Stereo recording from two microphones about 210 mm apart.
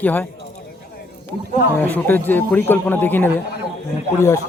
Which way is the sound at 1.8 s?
10° left (ahead or behind).